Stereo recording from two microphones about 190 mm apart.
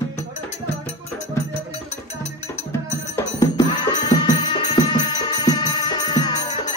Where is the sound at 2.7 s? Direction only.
15° left (ahead or behind).